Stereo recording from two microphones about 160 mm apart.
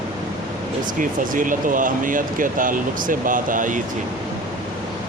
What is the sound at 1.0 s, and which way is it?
Speech, 55° right (ahead or behind).